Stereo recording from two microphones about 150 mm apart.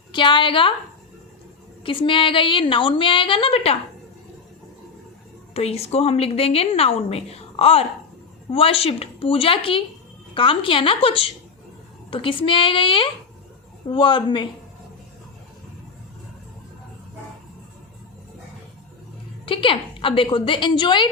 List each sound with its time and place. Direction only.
0.1 s a woman's voice: 30° left (ahead or behind)
1.8 s a woman's voice: 35° left (ahead or behind)
5.5 s a woman's voice: 45° left (ahead or behind)
19.5 s a woman's voice: 35° left (ahead or behind)